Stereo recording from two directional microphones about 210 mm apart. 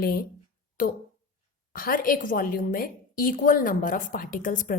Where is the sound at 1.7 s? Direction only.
40° left (ahead or behind).